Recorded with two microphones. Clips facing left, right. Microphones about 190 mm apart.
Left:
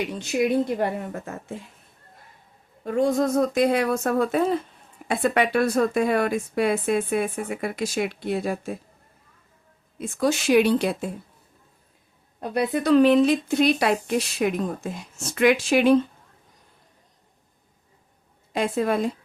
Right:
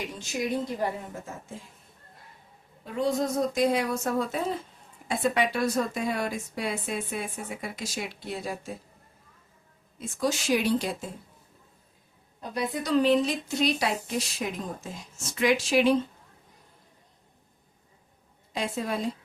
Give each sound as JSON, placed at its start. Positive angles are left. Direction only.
{"t": 0.2, "sound": "a woman's voice", "side_deg": 65}
{"t": 2.8, "sound": "a woman's voice", "side_deg": 50}
{"t": 10.0, "sound": "a woman's voice", "side_deg": 60}
{"t": 12.4, "sound": "a woman's voice", "side_deg": 60}
{"t": 18.5, "sound": "a woman's voice", "side_deg": 60}